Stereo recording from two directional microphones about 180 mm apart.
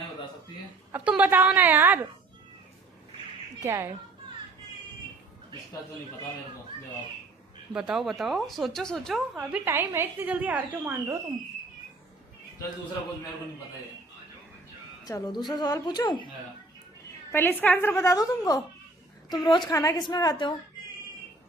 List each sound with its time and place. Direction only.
0.9 s speech: 10° right (ahead or behind)
3.6 s speech: 15° right (ahead or behind)
7.7 s speech: 5° right (ahead or behind)
9.5 s speech: 15° right (ahead or behind)
15.0 s a woman's voice: 20° left (ahead or behind)
17.3 s a woman's voice: 10° left (ahead or behind)